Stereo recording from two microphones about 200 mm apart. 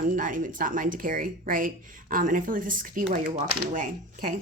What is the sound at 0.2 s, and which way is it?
Speech, 40° right (ahead or behind).